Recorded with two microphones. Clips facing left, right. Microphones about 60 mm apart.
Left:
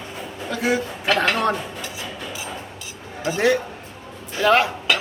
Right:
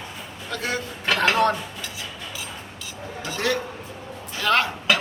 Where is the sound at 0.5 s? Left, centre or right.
Centre.